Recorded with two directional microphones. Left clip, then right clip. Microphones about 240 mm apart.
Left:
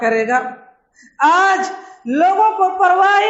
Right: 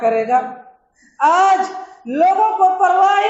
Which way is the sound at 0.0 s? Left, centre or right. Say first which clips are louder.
Even; left.